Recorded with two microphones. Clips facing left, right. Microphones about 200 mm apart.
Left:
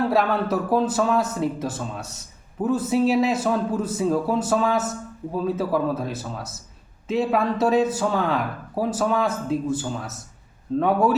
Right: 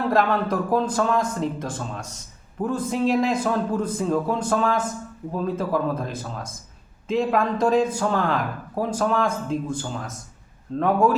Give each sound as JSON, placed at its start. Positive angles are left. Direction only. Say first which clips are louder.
{"t": 0.1, "sound": "speech", "louder": "even", "side_deg": 5}